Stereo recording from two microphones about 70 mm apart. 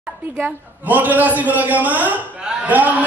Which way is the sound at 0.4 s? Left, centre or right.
Right.